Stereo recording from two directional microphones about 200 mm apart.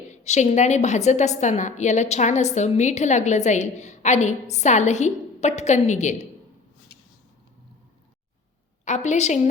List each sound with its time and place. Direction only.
0.3 s a woman's voice: 35° left (ahead or behind)
8.8 s a woman's voice: 35° left (ahead or behind)